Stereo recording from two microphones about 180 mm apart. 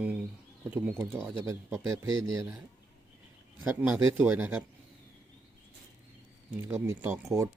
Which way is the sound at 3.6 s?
10° right (ahead or behind).